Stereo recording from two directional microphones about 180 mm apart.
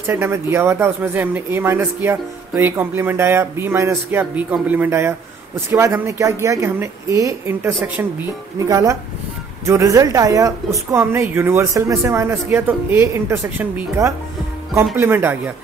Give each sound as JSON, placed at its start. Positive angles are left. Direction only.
{"t": 0.0, "sound": "speech", "side_deg": -15}